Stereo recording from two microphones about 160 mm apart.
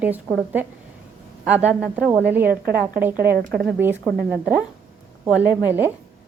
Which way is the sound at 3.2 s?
75° right (ahead or behind).